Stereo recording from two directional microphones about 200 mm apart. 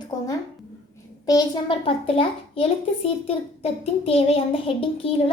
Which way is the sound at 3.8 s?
30° left (ahead or behind).